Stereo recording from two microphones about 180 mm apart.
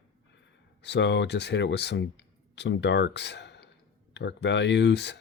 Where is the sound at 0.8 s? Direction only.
75° left (ahead or behind).